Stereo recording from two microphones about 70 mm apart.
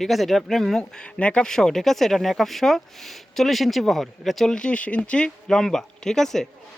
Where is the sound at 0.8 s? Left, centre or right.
Centre.